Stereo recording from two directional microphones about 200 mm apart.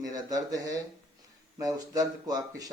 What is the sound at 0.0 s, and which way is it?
Speech, 20° right (ahead or behind).